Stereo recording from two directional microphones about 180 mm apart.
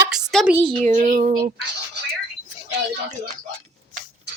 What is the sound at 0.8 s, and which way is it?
Child singing, 45° right (ahead or behind).